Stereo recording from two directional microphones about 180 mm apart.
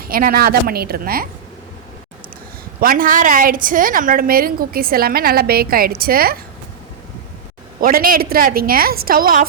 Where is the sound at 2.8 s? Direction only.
50° right (ahead or behind).